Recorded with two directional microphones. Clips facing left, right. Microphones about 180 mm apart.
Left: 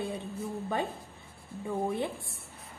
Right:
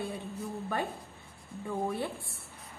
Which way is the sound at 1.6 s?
20° left (ahead or behind).